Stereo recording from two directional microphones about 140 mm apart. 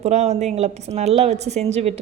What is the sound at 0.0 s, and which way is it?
A woman's voice, 50° right (ahead or behind).